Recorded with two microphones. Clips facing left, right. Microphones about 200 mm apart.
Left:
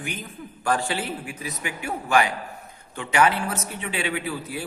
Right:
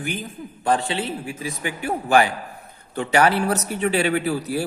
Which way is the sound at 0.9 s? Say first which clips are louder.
Right 3 dB; 25° right (ahead or behind).